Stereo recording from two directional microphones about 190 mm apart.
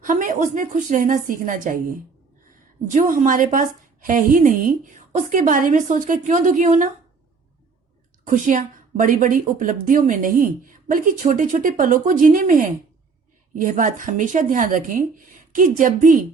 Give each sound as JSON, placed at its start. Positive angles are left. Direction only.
{"t": 0.0, "sound": "a woman's voice", "side_deg": -45}
{"t": 8.3, "sound": "a woman's voice", "side_deg": -45}